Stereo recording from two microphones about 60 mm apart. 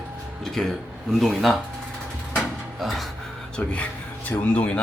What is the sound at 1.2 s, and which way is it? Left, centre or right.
Speech, centre.